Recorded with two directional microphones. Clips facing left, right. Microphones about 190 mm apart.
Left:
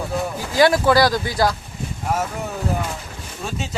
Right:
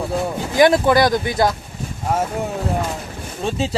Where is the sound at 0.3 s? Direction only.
20° right (ahead or behind).